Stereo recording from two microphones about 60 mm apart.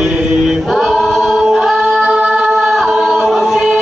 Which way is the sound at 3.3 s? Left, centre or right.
Centre.